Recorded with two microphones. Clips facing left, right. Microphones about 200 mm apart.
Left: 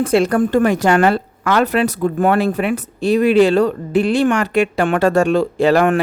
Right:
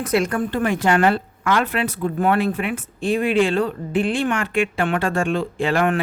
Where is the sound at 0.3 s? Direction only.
45° left (ahead or behind).